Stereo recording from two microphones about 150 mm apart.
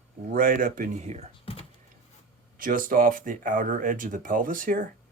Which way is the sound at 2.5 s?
65° right (ahead or behind).